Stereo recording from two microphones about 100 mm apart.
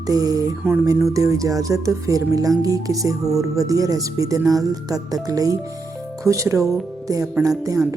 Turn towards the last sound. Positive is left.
turn(degrees=-35)  # may be behind; listen again after turning